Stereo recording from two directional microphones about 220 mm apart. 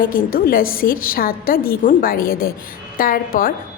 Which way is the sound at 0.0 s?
40° left (ahead or behind).